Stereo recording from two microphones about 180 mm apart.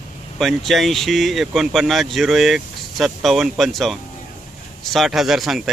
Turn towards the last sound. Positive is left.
turn(degrees=0)  # may be behind; listen again after turning